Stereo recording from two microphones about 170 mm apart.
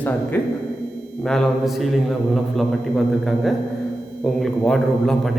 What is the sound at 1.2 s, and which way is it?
A man's voice, 5° left (ahead or behind).